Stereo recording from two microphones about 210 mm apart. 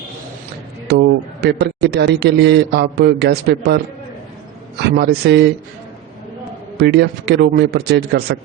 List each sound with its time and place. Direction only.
0.9 s a man's voice: 50° right (ahead or behind)
4.9 s a man's voice: 50° right (ahead or behind)
6.7 s a man's voice: 50° right (ahead or behind)